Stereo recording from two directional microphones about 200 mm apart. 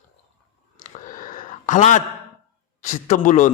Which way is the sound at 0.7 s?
40° left (ahead or behind).